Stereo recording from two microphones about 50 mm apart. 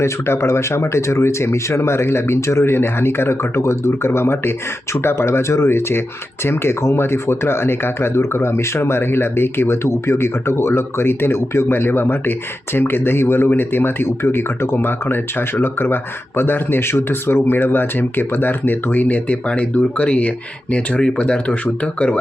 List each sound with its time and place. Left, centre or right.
0.0 s speech: left
11.7 s speech: left